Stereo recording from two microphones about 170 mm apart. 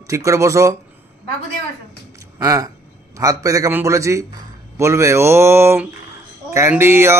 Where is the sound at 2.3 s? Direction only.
20° right (ahead or behind).